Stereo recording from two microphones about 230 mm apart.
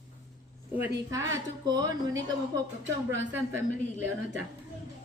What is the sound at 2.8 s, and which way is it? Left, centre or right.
Speech, right.